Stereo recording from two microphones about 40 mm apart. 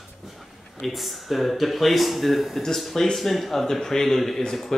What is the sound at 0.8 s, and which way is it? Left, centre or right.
A man's voice, centre.